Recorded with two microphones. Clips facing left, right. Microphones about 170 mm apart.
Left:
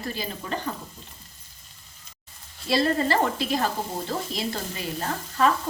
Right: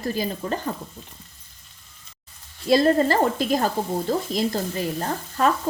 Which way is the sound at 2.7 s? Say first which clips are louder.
Right 5 dB; 45° right (ahead or behind).